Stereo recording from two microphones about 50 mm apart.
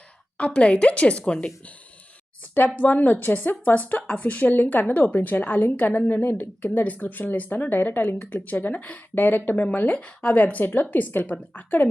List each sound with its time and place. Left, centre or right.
0.3 s speech: left
2.4 s speech: left
6.2 s speech: left
6.8 s speech: left